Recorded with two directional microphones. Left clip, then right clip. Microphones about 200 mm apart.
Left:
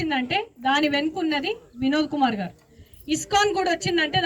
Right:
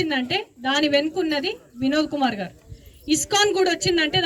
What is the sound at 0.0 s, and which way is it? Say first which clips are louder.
A woman's voice: right 1 dB; 25° right (ahead or behind).